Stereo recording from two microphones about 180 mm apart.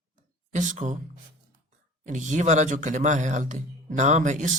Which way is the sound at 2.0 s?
45° right (ahead or behind).